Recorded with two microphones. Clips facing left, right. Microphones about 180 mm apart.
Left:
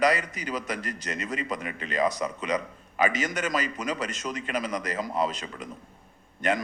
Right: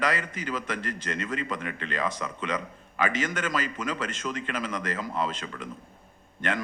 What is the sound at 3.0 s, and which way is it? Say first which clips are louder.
A man's voice: left 2 dB; 40° left (ahead or behind).